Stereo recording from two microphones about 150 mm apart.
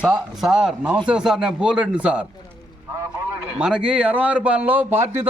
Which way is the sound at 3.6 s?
5° right (ahead or behind).